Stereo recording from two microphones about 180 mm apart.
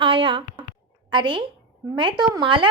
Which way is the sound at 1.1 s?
25° right (ahead or behind).